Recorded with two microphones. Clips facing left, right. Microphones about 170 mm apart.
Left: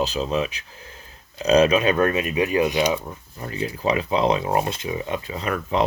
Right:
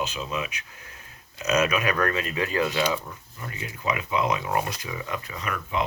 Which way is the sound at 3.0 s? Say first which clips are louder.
Left 5 dB; 30° left (ahead or behind).